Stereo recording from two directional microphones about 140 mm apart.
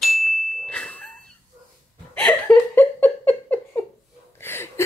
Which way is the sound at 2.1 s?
10° left (ahead or behind).